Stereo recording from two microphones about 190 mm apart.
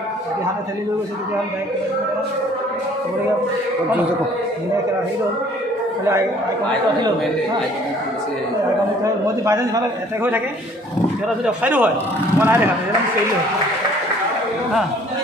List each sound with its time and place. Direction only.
9.0 s a man's voice: 15° right (ahead or behind)
11.4 s a man's voice: 10° right (ahead or behind)